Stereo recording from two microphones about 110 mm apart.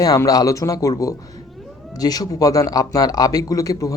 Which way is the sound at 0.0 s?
35° left (ahead or behind).